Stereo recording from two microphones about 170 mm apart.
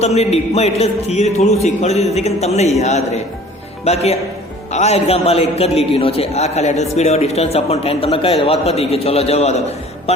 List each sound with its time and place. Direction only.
0.0 s a man's voice: 40° left (ahead or behind)